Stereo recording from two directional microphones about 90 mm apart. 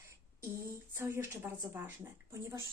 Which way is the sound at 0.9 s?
25° right (ahead or behind).